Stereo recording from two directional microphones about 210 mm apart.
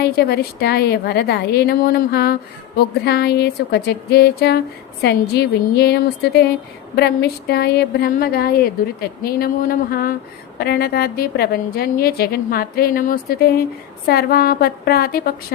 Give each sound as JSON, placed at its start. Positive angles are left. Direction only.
{"t": 0.0, "sound": "a woman's voice", "side_deg": 50}